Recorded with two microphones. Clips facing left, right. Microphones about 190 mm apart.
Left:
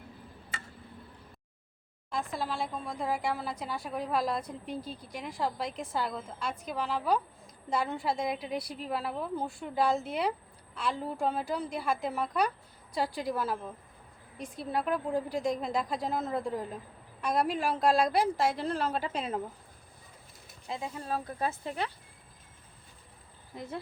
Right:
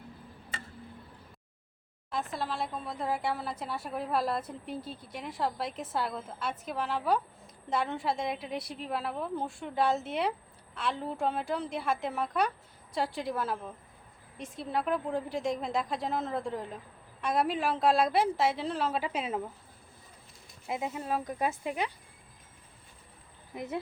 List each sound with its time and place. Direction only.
2.0 s a woman's voice: centre (ahead or behind)
20.7 s speech: 20° right (ahead or behind)
23.6 s speech: 20° right (ahead or behind)